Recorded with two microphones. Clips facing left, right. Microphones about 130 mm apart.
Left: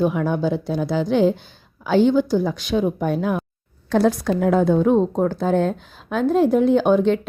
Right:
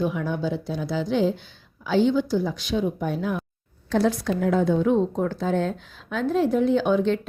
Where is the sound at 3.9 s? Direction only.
45° left (ahead or behind).